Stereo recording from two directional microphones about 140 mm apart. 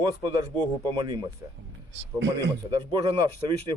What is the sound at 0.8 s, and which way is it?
Speech, 25° right (ahead or behind).